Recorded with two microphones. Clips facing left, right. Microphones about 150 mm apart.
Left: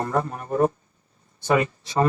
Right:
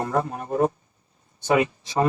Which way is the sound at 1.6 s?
15° right (ahead or behind).